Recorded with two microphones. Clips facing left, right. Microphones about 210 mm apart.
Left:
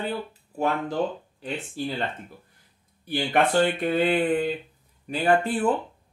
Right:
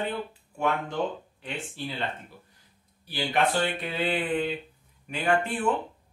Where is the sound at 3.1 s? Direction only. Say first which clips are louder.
Left 4 dB; 50° left (ahead or behind); by 5.7 s 35° left (ahead or behind).